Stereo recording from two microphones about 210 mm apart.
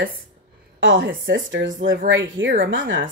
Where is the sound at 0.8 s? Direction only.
65° right (ahead or behind).